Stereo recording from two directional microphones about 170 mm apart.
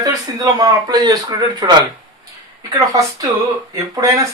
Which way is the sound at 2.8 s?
20° right (ahead or behind).